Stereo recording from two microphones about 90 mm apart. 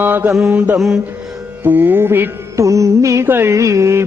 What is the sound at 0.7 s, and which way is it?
Mantra, 5° right (ahead or behind).